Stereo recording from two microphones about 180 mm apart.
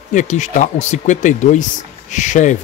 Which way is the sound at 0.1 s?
40° left (ahead or behind).